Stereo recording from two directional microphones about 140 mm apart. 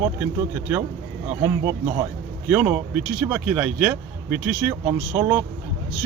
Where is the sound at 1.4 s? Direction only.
15° right (ahead or behind).